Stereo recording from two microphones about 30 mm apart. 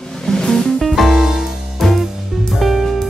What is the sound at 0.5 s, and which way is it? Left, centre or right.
Music, centre.